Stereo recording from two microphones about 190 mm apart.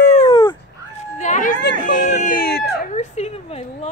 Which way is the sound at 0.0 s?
40° left (ahead or behind).